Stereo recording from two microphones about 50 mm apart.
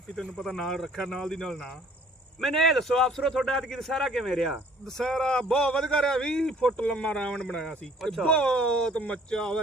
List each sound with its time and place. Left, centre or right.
0.2 s a man's voice: centre
6.7 s a man's voice: left